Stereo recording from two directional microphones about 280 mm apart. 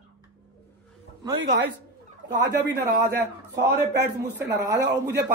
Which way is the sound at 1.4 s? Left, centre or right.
Right.